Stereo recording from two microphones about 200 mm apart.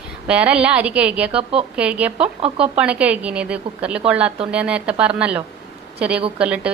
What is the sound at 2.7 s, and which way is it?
A woman's voice, 5° right (ahead or behind).